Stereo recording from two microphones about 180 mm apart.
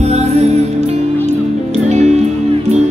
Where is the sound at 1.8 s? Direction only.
40° right (ahead or behind).